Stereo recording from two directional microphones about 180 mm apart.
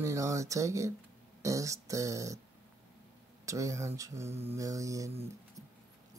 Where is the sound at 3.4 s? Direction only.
15° right (ahead or behind).